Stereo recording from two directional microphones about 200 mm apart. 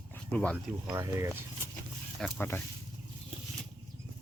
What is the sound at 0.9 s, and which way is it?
Speech, 15° right (ahead or behind).